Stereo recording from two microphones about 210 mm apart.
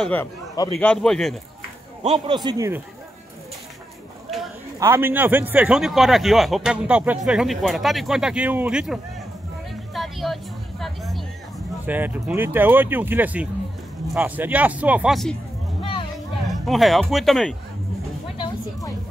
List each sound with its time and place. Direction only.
0.0 s a man's voice: 10° left (ahead or behind)
2.2 s speech: 20° right (ahead or behind)
4.7 s a man's voice: 10° right (ahead or behind)
9.9 s vehicle: centre (ahead or behind)
11.8 s speech: 10° right (ahead or behind)
15.8 s vehicle: 25° left (ahead or behind)
16.4 s a man's voice: centre (ahead or behind)
18.4 s a sound: 20° left (ahead or behind)